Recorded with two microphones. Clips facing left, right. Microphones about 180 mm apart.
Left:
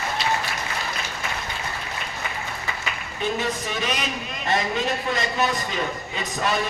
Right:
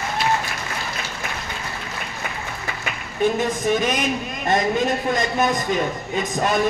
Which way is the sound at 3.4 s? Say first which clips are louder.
Right 7 dB; 50° right (ahead or behind).